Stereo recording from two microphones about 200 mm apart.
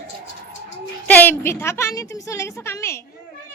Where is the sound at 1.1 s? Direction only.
10° left (ahead or behind).